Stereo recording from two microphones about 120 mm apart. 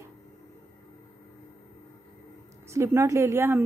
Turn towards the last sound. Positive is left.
turn(degrees=-20)  # may be behind; listen again after turning